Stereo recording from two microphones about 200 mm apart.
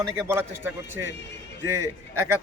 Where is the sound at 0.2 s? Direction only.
10° right (ahead or behind).